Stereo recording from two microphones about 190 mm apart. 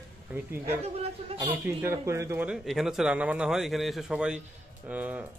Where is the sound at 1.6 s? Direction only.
10° right (ahead or behind).